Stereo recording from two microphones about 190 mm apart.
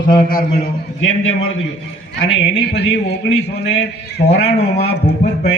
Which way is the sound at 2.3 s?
65° left (ahead or behind).